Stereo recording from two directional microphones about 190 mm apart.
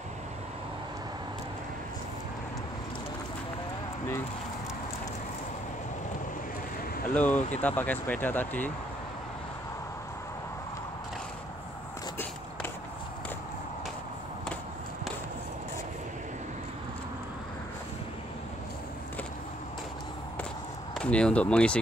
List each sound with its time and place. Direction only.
7.2 s speech: 10° left (ahead or behind)
20.9 s speech: 5° left (ahead or behind)